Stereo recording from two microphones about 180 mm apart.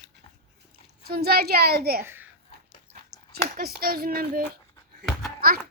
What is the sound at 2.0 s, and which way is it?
Speech, 10° right (ahead or behind).